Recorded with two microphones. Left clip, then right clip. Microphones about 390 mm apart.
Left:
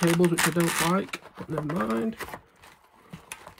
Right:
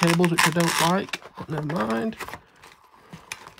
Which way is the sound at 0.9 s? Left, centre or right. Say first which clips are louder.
Right 3 dB; centre.